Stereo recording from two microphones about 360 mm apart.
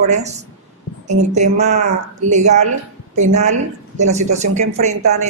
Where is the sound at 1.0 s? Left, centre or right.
Centre.